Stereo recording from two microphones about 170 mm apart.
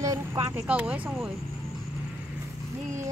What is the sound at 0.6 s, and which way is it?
Speech, 5° right (ahead or behind).